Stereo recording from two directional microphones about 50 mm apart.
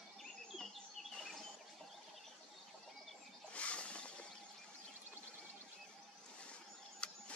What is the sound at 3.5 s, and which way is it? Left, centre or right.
Wild animals, left.